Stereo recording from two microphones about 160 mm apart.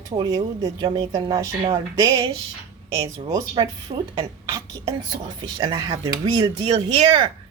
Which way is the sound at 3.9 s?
40° right (ahead or behind).